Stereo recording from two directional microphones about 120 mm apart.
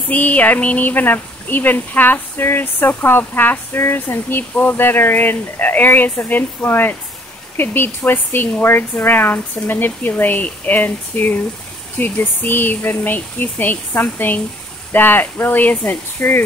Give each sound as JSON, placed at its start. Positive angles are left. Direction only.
{"t": 0.1, "sound": "speech", "side_deg": 15}